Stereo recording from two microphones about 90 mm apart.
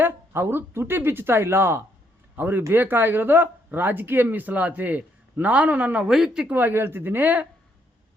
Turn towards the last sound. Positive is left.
turn(degrees=-20)  # may be behind; listen again after turning